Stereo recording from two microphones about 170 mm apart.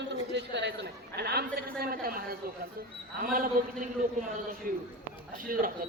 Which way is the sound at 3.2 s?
55° right (ahead or behind).